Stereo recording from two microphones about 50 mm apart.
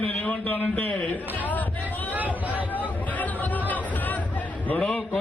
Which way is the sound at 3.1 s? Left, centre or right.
Left.